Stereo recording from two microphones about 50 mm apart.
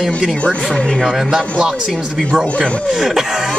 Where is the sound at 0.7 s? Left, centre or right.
Centre.